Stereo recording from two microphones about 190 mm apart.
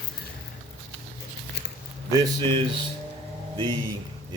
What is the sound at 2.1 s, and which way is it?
Speech, 20° right (ahead or behind).